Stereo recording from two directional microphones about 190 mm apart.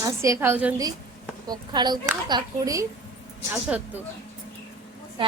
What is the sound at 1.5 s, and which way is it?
A woman's voice, 20° right (ahead or behind).